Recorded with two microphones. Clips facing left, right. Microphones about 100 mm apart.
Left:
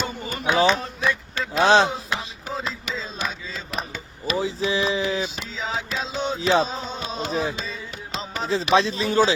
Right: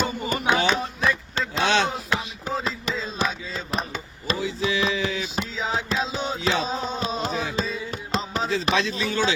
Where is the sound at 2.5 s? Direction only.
Centre (ahead or behind).